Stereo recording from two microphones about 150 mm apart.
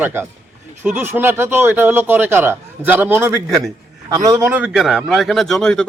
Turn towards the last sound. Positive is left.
turn(degrees=5)  # may be behind; listen again after turning